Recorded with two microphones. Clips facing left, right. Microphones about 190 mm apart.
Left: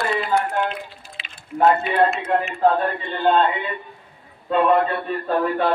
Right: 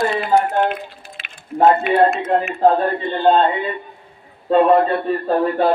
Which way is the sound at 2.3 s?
30° right (ahead or behind).